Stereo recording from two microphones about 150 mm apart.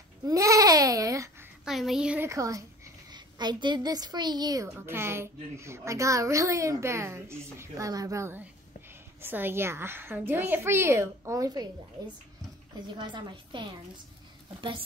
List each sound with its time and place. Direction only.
0.2 s babbling: 20° right (ahead or behind)
1.6 s a woman's voice: centre (ahead or behind)
2.2 s a woman's voice: 20° right (ahead or behind)
4.6 s a child's voice: 15° right (ahead or behind)
12.8 s a woman's voice: 30° right (ahead or behind)